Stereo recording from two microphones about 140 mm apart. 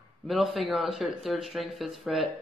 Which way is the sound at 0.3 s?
Centre (ahead or behind).